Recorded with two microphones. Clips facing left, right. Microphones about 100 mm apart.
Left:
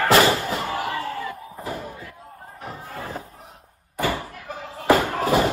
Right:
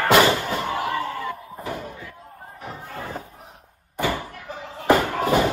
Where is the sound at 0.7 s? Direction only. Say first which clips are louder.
Right 1 dB; 30° right (ahead or behind).